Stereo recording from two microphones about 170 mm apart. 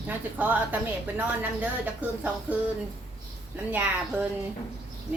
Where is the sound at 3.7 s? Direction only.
10° right (ahead or behind).